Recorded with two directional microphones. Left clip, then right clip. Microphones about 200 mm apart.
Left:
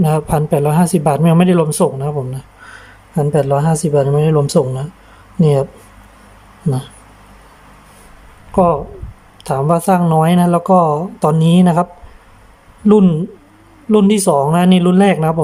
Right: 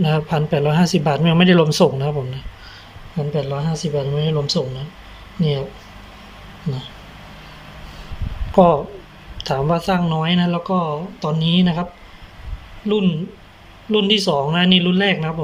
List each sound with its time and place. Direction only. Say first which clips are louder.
0.0 s speech: left 4 dB; 25° left (ahead or behind)
3.2 s speech: left 9 dB; 40° left (ahead or behind)
8.5 s speech: even; 15° left (ahead or behind); by 11.9 s 35° left (ahead or behind)
12.9 s speech: left 8 dB; 40° left (ahead or behind)